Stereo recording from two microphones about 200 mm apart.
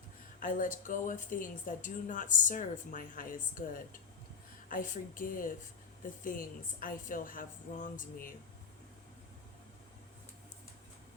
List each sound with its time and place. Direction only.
0.3 s a woman's voice: 40° left (ahead or behind)